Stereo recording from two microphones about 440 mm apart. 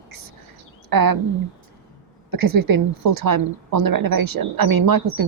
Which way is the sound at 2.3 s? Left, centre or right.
Right.